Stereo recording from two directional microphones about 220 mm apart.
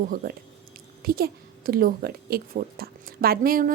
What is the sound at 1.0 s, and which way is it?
A woman's voice, 45° right (ahead or behind).